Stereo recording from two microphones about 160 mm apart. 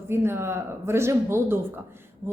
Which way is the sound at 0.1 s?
15° right (ahead or behind).